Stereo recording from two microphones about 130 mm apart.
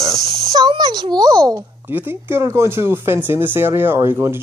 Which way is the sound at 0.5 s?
30° right (ahead or behind).